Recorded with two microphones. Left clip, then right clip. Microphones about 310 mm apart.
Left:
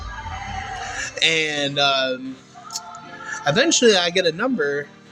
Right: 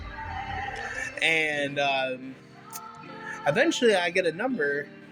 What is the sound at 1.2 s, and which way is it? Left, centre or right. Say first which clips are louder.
Speech: left 5 dB; right.